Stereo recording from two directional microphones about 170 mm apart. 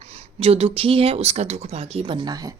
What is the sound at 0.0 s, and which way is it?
Speech, 35° right (ahead or behind).